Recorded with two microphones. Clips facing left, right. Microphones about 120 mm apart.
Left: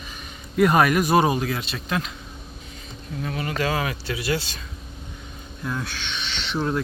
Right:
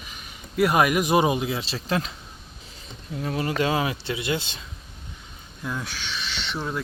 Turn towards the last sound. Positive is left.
turn(degrees=0)  # may be behind; listen again after turning